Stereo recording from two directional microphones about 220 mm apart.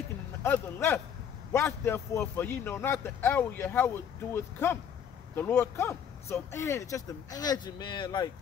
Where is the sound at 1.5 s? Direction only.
10° left (ahead or behind).